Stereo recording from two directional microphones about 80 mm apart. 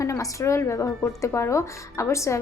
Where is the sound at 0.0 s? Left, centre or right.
Left.